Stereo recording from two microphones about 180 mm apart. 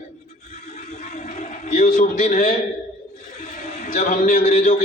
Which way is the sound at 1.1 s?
40° left (ahead or behind).